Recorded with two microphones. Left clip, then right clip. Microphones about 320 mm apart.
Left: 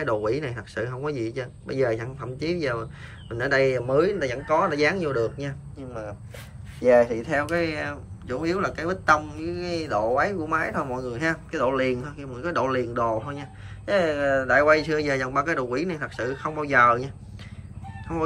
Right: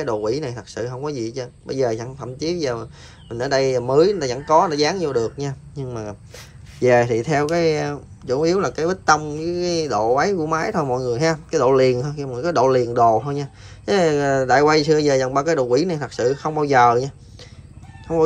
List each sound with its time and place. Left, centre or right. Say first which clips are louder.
0.0 s speech: right 3 dB; centre